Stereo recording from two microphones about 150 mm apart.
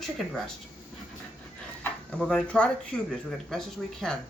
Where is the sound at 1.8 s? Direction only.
5° left (ahead or behind).